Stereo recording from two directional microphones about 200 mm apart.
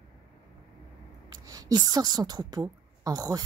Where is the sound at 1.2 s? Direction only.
15° right (ahead or behind).